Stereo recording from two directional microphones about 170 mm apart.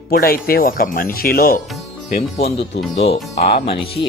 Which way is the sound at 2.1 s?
35° left (ahead or behind).